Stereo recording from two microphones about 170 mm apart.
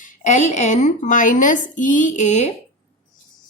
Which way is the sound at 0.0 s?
45° left (ahead or behind).